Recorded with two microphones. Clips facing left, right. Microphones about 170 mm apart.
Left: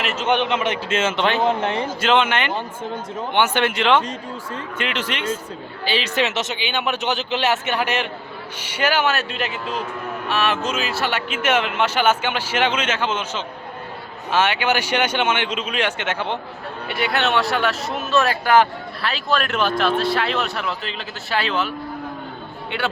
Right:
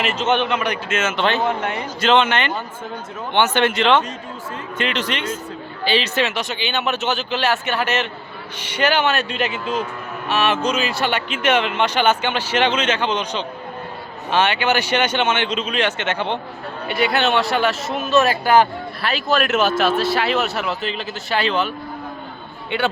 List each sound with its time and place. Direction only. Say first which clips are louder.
0.0 s speech: right 3 dB; centre (ahead or behind)
0.3 s a man's voice: left 1 dB; 20° left (ahead or behind)
2.0 s speech: right 3 dB; 10° left (ahead or behind)
22.7 s speech: right 4 dB; centre (ahead or behind)